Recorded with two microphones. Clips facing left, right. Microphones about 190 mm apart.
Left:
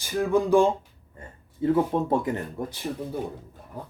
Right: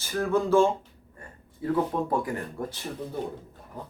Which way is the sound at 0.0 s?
15° left (ahead or behind).